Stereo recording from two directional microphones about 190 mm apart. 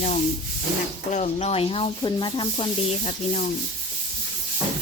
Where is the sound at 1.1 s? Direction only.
35° left (ahead or behind).